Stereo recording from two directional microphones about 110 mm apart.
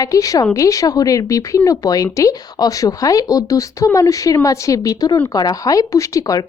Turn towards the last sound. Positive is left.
turn(degrees=35)  # may be behind; listen again after turning